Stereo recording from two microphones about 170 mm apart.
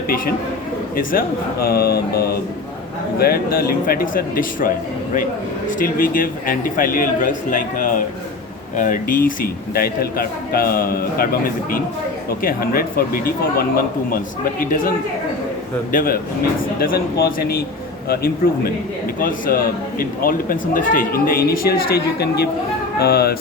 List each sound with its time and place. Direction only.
1.6 s speech: 65° left (ahead or behind)
5.8 s a man's voice: 55° left (ahead or behind)
12.4 s speech: 60° left (ahead or behind)
14.6 s speech: 55° left (ahead or behind)